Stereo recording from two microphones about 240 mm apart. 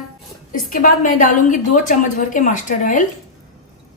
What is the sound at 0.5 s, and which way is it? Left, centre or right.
A woman's voice, left.